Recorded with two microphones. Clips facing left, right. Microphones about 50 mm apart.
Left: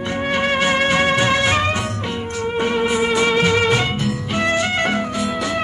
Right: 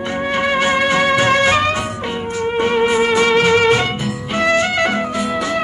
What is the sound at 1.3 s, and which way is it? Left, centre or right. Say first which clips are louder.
Music: right 4 dB; right.